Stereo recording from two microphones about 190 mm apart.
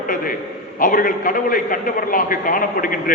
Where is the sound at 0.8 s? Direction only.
45° left (ahead or behind).